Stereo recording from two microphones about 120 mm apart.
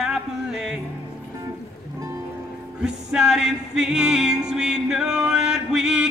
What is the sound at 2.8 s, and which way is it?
Music, 5° right (ahead or behind).